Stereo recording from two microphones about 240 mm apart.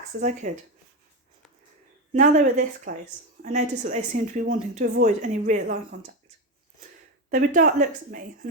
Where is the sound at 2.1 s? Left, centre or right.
Right.